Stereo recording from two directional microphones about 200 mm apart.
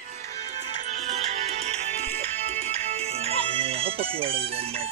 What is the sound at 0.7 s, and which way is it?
Music, 35° right (ahead or behind).